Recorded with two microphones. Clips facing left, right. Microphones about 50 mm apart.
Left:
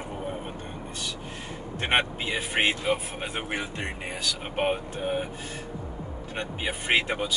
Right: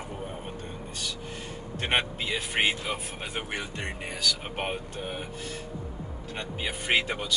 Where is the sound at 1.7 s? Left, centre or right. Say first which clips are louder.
Left 2 dB; centre.